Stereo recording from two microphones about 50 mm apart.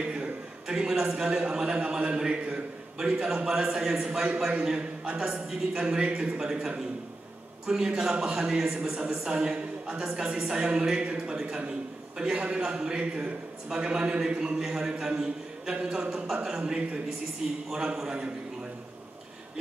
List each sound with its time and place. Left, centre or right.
0.0 s a man's voice: right